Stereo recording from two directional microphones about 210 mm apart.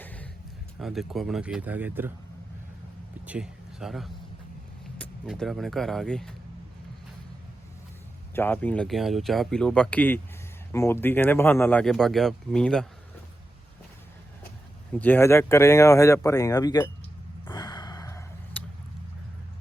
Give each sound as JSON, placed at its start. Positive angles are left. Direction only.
{"t": 0.0, "sound": "a sound", "side_deg": 5}
{"t": 0.8, "sound": "speech", "side_deg": 0}
{"t": 3.2, "sound": "speech", "side_deg": -5}
{"t": 5.2, "sound": "speech", "side_deg": 0}
{"t": 8.4, "sound": "speech", "side_deg": 10}
{"t": 14.9, "sound": "speech", "side_deg": 10}
{"t": 17.5, "sound": "sigh", "side_deg": 20}